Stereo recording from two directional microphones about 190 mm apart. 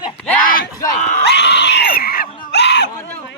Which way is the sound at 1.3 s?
65° left (ahead or behind).